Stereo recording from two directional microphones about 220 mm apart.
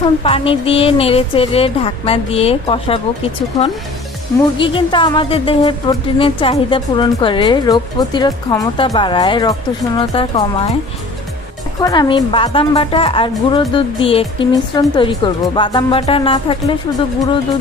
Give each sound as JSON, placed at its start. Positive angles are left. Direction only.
{"t": 0.0, "sound": "music", "side_deg": 25}
{"t": 4.6, "sound": "music", "side_deg": 20}
{"t": 11.8, "sound": "music", "side_deg": 20}